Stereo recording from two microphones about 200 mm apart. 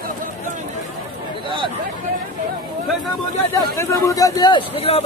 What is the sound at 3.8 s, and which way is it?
A man's voice, 15° left (ahead or behind).